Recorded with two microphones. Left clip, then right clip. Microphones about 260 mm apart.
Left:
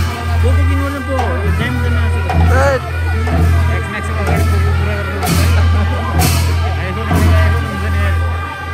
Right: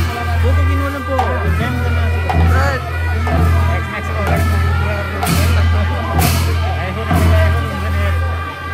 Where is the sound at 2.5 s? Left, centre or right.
Centre.